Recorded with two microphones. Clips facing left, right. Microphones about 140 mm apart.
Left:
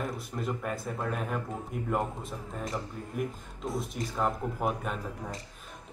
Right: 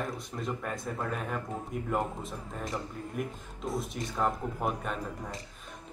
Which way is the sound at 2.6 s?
Centre (ahead or behind).